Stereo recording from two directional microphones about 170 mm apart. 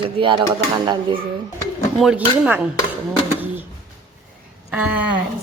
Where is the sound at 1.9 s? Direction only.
Centre (ahead or behind).